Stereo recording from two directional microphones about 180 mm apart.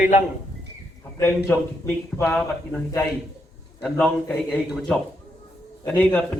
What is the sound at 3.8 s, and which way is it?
A man's voice, 5° left (ahead or behind).